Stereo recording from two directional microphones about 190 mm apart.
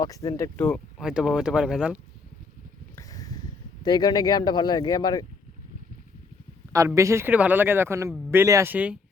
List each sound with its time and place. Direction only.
0.0 s speech: 20° left (ahead or behind); by 2.0 s 5° right (ahead or behind)
2.9 s a sound: 20° left (ahead or behind)
3.8 s speech: 20° left (ahead or behind)
6.7 s speech: 15° right (ahead or behind)